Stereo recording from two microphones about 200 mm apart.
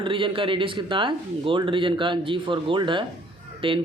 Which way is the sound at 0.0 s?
25° right (ahead or behind).